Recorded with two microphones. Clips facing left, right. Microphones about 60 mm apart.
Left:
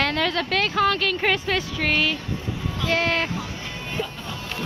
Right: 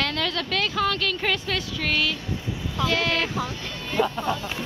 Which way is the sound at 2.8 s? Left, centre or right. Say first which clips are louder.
Left 1 dB; left.